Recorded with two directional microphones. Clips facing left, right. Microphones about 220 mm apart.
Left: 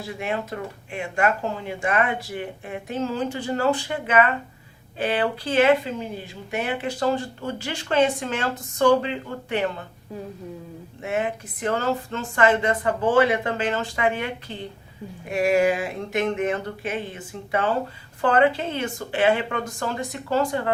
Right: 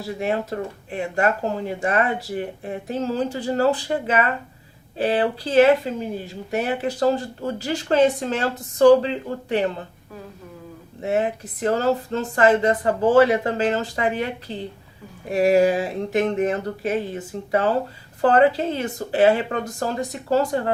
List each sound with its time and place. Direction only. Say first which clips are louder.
0.2 s speech: right 4 dB; 35° right (ahead or behind)
11.0 s speech: right 4 dB; 35° right (ahead or behind)